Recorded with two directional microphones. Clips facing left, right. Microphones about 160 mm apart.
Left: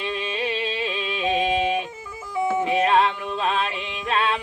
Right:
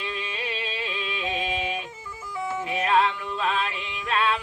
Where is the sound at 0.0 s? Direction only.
25° left (ahead or behind).